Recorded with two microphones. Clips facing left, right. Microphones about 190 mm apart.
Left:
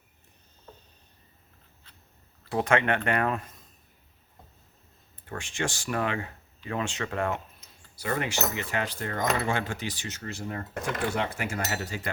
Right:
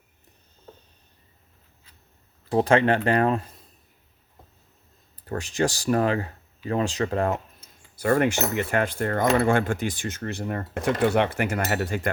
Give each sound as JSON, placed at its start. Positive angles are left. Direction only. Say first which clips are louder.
{"t": 2.5, "sound": "speech", "louder": "right 5 dB", "side_deg": -35}
{"t": 5.1, "sound": "speech", "louder": "right 7 dB", "side_deg": -40}
{"t": 7.9, "sound": "speech", "louder": "right 9 dB", "side_deg": -50}